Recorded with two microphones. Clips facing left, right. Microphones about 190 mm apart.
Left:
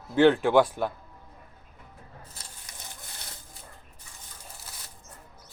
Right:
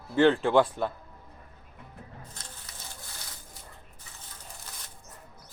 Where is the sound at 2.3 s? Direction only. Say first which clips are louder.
Right 1 dB; 10° left (ahead or behind).